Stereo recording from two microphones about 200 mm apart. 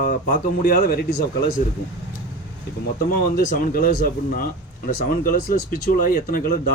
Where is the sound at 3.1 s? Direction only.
45° left (ahead or behind).